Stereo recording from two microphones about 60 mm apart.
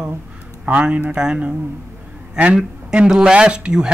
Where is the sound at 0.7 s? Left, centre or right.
Right.